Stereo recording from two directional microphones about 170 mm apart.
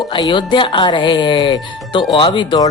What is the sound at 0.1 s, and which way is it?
Speech, 25° left (ahead or behind).